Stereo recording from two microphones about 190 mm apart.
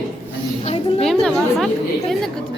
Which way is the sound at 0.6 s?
35° left (ahead or behind).